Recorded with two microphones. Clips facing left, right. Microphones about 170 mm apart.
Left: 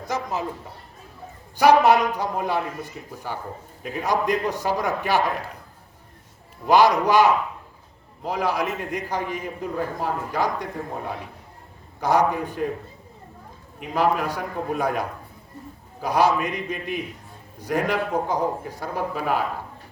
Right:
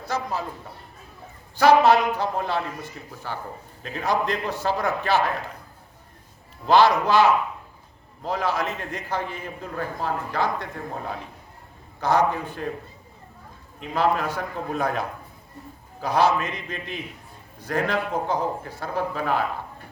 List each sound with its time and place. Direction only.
0.0 s a sound: 20° left (ahead or behind)
1.5 s a man's voice: 15° left (ahead or behind)
6.7 s a man's voice: 15° left (ahead or behind)
11.9 s a man's voice: 15° left (ahead or behind)
13.7 s a man's voice: 10° left (ahead or behind)